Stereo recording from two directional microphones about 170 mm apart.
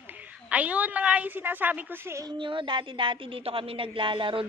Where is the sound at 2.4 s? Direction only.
30° right (ahead or behind).